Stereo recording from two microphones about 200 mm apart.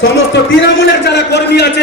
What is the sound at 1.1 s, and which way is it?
Speech, 55° left (ahead or behind).